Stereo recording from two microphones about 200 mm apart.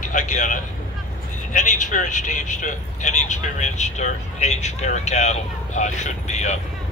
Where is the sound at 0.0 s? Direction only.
40° left (ahead or behind).